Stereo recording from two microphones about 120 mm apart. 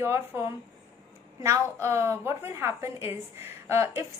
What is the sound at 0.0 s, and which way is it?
Speech, 25° right (ahead or behind).